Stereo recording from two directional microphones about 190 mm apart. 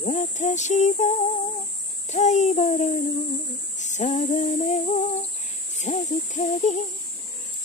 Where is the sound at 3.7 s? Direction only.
40° left (ahead or behind).